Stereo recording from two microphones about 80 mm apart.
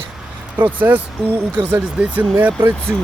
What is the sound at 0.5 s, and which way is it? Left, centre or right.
Speech, right.